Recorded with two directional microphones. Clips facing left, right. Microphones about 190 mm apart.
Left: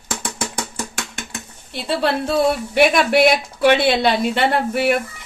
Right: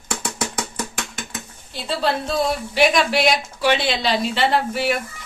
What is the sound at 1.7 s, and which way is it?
Speech, 65° left (ahead or behind).